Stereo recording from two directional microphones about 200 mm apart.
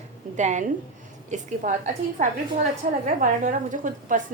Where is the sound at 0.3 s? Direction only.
35° right (ahead or behind).